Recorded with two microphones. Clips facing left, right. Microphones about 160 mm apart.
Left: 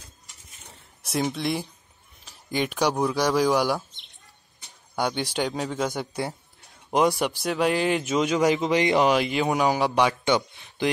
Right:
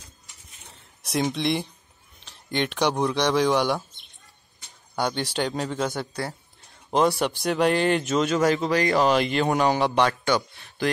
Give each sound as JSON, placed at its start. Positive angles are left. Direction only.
{"t": 1.0, "sound": "speech", "side_deg": 0}
{"t": 4.9, "sound": "speech", "side_deg": 10}